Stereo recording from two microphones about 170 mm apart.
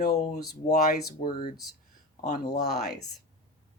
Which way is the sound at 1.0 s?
60° left (ahead or behind).